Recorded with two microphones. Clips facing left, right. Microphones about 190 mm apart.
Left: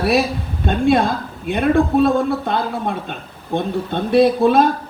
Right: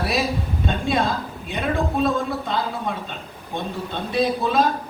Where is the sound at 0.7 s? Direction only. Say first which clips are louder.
Left 8 dB; 55° left (ahead or behind).